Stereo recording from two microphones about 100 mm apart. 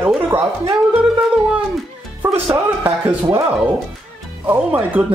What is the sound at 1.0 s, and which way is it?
Music, 10° right (ahead or behind).